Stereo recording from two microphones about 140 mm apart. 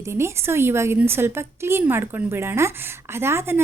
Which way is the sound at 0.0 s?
20° right (ahead or behind).